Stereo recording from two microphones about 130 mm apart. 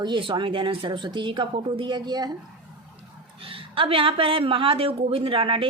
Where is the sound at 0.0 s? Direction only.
40° right (ahead or behind).